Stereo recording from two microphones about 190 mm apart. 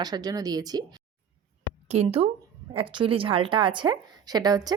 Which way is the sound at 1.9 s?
35° right (ahead or behind).